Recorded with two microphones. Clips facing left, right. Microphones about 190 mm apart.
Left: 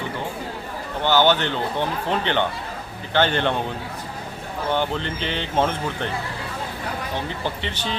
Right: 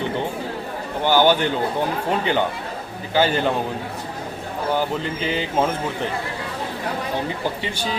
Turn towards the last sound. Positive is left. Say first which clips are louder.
# right 2 dB
turn(degrees=-10)  # may be behind; listen again after turning